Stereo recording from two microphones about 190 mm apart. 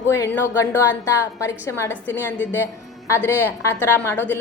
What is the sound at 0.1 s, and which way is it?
A woman's voice, 15° left (ahead or behind).